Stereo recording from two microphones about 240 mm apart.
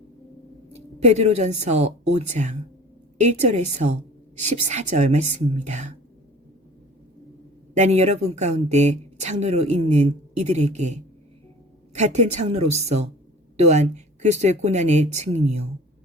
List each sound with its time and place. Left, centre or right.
0.9 s a woman's voice: right
7.7 s a woman's voice: right